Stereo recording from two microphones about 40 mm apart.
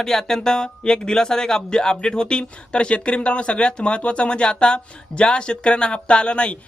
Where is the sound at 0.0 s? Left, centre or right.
Centre.